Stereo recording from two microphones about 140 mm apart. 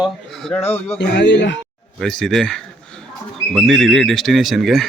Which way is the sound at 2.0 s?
5° left (ahead or behind).